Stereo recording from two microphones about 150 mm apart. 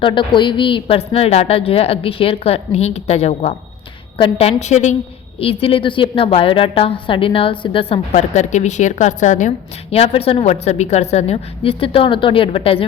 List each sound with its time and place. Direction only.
0.0 s a woman's voice: 35° left (ahead or behind); by 4.9 s 50° left (ahead or behind)
5.4 s a woman's voice: 40° left (ahead or behind)
9.9 s a woman's voice: 40° left (ahead or behind)